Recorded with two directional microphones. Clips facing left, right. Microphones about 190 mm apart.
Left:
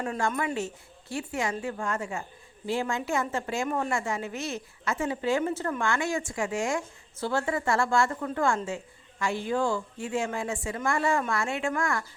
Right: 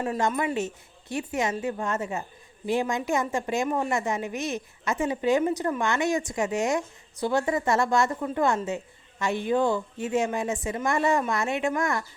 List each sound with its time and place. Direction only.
0.2 s a woman's voice: 20° right (ahead or behind)